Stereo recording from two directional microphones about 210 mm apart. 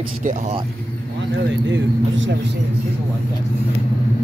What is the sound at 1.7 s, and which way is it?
Speech, 65° right (ahead or behind).